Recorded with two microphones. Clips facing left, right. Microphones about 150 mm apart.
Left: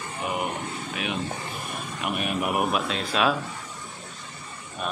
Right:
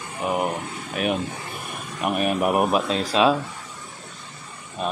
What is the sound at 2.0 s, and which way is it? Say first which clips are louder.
Speech: right 6 dB; 40° right (ahead or behind).